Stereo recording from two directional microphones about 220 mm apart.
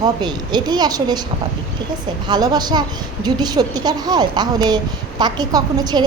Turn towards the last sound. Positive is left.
turn(degrees=-20)  # may be behind; listen again after turning